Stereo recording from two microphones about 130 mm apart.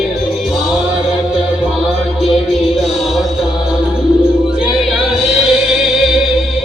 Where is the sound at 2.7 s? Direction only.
Centre (ahead or behind).